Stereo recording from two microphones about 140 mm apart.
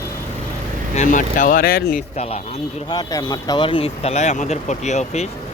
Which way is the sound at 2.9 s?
30° left (ahead or behind).